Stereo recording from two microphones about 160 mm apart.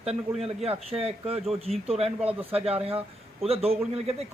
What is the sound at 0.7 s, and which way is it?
A man's voice, 35° right (ahead or behind).